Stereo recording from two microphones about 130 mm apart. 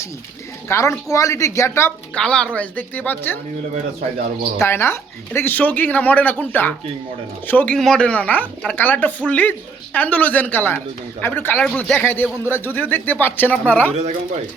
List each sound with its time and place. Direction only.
0.7 s a woman's voice: 20° left (ahead or behind)
2.1 s speech: 5° left (ahead or behind)
4.5 s speech: 20° left (ahead or behind)